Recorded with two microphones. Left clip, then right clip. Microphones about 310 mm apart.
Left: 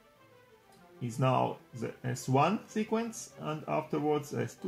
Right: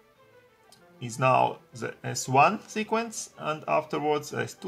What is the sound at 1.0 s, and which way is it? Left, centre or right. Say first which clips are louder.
Speech: right 7 dB; right.